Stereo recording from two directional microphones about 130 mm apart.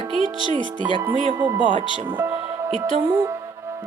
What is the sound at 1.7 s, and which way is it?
Speech, 40° left (ahead or behind).